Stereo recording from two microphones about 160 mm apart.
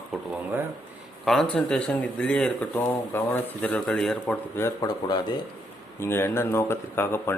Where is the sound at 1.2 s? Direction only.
5° left (ahead or behind).